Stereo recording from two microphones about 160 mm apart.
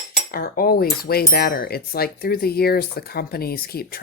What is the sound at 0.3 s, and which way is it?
A woman's voice, 65° left (ahead or behind).